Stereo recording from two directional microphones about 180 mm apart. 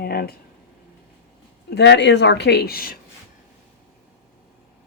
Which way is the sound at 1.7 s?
70° left (ahead or behind).